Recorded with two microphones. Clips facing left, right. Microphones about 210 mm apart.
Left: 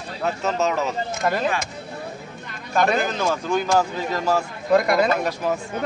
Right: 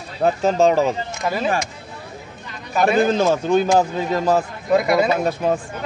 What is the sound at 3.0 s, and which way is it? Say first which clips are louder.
Speech: right 7 dB; 30° right (ahead or behind).